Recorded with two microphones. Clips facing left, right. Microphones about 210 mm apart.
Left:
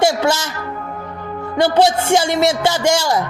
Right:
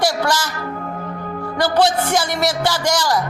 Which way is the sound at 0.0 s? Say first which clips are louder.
Left 4 dB; 25° left (ahead or behind).